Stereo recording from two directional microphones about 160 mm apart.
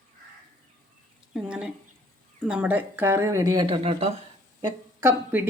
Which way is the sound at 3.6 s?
35° right (ahead or behind).